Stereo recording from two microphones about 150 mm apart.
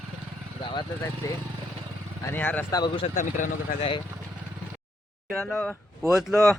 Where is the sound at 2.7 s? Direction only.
30° left (ahead or behind).